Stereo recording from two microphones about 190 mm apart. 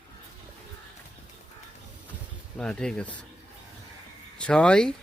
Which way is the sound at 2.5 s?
5° left (ahead or behind).